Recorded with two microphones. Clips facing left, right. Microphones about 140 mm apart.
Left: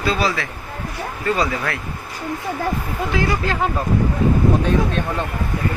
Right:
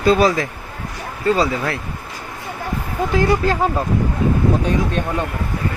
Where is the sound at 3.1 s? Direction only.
45° right (ahead or behind).